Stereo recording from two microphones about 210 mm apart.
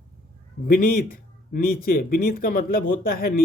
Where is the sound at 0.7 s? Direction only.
45° left (ahead or behind).